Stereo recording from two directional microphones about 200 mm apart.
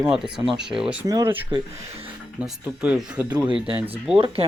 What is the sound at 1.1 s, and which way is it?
Speech, 15° right (ahead or behind).